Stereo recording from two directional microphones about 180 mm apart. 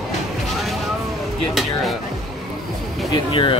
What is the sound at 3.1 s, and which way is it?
Speech, 30° left (ahead or behind).